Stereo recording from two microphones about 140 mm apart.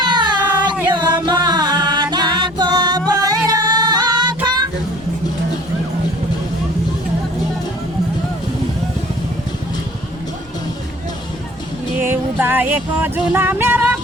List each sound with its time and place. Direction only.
0.0 s a sound: 30° right (ahead or behind)
0.6 s music: 35° right (ahead or behind)
11.9 s music: 15° right (ahead or behind)